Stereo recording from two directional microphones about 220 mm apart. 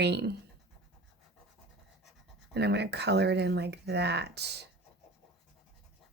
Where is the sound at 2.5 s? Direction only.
50° right (ahead or behind).